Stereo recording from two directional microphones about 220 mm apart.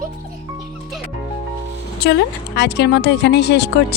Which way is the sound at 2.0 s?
50° left (ahead or behind).